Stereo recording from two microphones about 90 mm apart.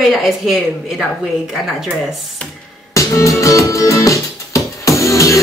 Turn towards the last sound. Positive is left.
turn(degrees=35)  # may be behind; listen again after turning